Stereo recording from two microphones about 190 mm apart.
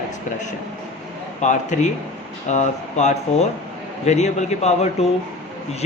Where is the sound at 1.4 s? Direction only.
40° left (ahead or behind).